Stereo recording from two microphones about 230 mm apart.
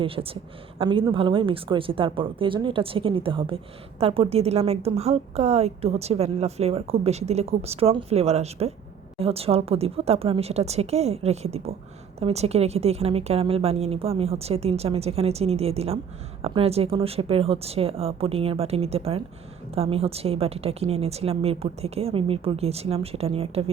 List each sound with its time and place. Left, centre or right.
0.0 s a woman's voice: right